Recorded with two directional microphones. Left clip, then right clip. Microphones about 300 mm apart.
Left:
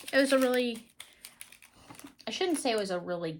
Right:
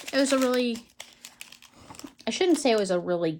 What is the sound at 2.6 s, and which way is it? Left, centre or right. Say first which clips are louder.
Speech: right 7 dB; right.